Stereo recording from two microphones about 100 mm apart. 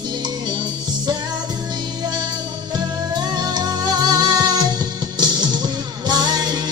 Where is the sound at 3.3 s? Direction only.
45° right (ahead or behind).